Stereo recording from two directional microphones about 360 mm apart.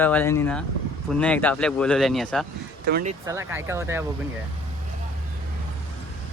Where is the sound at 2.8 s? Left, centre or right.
Right.